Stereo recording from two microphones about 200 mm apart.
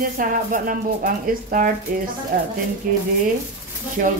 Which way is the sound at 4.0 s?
45° right (ahead or behind).